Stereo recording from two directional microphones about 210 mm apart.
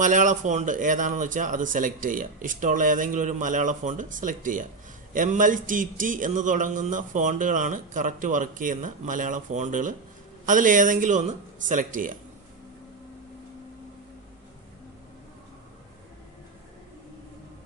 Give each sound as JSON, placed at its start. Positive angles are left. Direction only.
{"t": 0.0, "sound": "a man's voice", "side_deg": -35}